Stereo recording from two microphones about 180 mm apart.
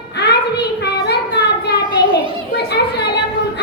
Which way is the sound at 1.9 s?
75° left (ahead or behind).